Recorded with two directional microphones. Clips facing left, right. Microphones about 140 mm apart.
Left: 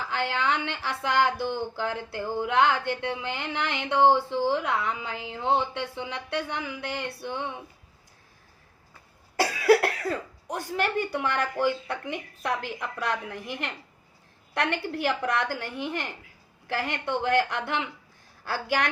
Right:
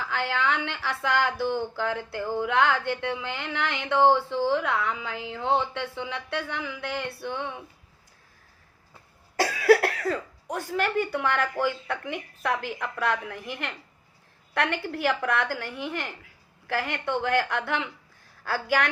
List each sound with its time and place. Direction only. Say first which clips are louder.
0.1 s speech: even; 20° left (ahead or behind)
9.4 s cough: right 1 dB; 20° left (ahead or behind)
10.5 s a woman's voice: right 1 dB; 20° left (ahead or behind)